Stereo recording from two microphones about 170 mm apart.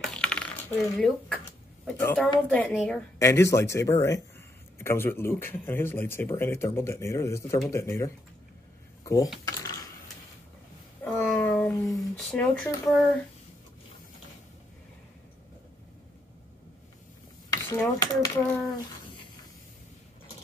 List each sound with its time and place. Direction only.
0.0 s coin: 5° left (ahead or behind)
0.9 s speech: 5° left (ahead or behind)
3.2 s speech: 15° left (ahead or behind)
9.4 s typing: 20° left (ahead or behind)
11.1 s a sound: 10° left (ahead or behind)
11.9 s speech: 5° left (ahead or behind)
17.5 s speech: 15° left (ahead or behind)